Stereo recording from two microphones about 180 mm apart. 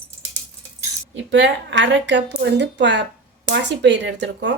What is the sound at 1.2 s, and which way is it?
A woman's voice, 85° right.